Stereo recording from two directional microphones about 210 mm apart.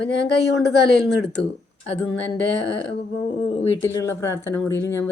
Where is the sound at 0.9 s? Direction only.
Centre (ahead or behind).